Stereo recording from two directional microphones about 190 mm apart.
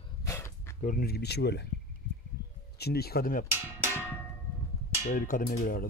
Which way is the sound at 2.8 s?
55° left (ahead or behind).